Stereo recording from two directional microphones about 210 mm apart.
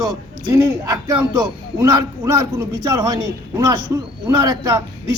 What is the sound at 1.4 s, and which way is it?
A man's voice, 15° right (ahead or behind).